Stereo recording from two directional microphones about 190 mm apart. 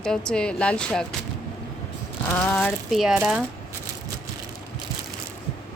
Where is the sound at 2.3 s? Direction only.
5° left (ahead or behind).